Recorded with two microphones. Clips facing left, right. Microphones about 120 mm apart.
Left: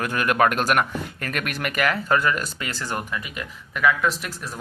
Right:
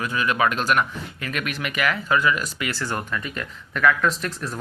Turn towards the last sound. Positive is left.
turn(degrees=0)  # may be behind; listen again after turning